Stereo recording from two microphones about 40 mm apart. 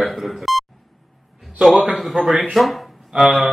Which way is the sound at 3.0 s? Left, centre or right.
Centre.